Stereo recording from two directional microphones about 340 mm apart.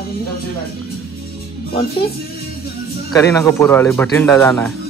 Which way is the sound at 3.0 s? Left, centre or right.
Centre.